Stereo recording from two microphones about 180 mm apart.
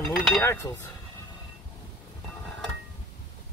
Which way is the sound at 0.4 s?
15° left (ahead or behind).